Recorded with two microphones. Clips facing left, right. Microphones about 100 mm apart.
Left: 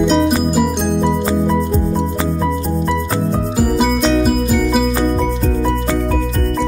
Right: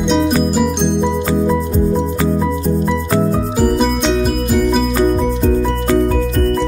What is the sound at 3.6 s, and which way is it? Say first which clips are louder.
Music: even; 5° left (ahead or behind).